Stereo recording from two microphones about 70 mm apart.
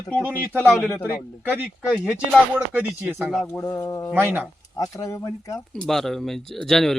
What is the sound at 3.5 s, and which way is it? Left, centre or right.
Speech, left.